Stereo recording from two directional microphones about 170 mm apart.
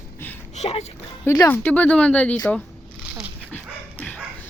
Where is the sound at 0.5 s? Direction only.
40° left (ahead or behind).